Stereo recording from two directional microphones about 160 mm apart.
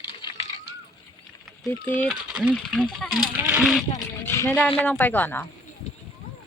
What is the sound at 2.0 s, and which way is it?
Speech, 5° right (ahead or behind).